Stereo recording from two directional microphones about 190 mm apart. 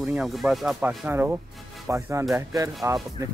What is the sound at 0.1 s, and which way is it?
Speech, centre (ahead or behind).